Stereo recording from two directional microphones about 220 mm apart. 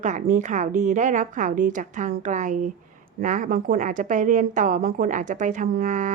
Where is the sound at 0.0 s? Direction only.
35° right (ahead or behind).